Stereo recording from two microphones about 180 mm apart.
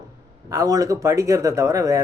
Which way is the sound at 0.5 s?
20° right (ahead or behind).